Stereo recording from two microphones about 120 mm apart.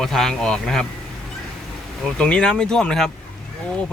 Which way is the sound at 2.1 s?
10° left (ahead or behind).